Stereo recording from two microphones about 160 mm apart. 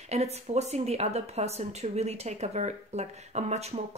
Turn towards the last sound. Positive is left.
turn(degrees=-40)  # may be behind; listen again after turning